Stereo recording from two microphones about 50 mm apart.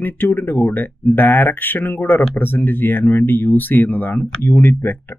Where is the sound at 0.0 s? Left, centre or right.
Left.